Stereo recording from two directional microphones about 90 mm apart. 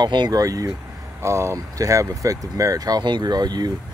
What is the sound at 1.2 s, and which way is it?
Speech, 30° right (ahead or behind).